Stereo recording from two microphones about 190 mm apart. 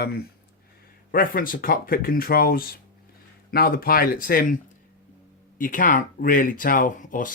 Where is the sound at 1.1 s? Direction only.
50° left (ahead or behind).